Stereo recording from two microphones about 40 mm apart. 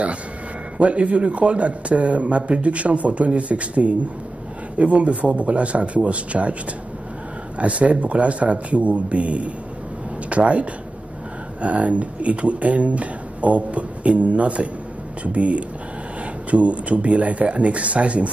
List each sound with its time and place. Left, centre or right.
0.7 s speech: right
7.5 s speech: right